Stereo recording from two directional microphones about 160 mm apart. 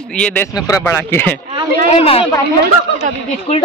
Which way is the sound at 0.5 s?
20° left (ahead or behind).